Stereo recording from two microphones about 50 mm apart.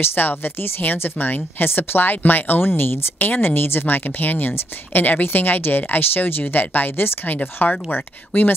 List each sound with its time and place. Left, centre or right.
0.0 s speech: left